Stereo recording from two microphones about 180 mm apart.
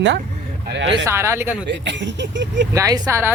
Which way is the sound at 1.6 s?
75° right (ahead or behind).